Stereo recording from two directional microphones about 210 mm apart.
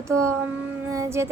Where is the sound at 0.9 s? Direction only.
15° right (ahead or behind).